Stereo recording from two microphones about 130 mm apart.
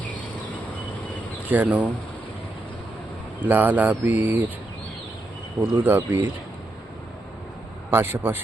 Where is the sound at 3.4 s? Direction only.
15° right (ahead or behind).